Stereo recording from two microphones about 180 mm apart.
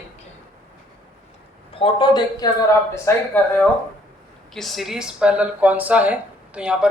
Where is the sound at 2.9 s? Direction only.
10° left (ahead or behind).